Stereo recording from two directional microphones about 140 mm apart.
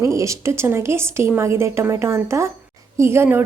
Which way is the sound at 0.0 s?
20° right (ahead or behind).